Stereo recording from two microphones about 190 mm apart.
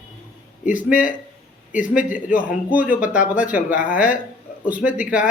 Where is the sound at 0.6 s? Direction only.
45° left (ahead or behind).